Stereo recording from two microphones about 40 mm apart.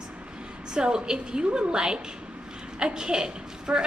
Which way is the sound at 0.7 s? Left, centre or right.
Centre.